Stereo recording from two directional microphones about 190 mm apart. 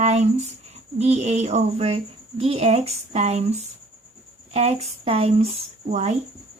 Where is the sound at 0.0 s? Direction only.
35° right (ahead or behind).